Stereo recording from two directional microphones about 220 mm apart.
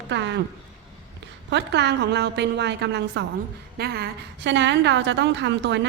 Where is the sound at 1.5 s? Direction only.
50° right (ahead or behind).